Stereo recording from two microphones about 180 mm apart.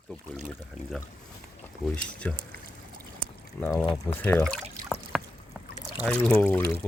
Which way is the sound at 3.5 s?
10° left (ahead or behind).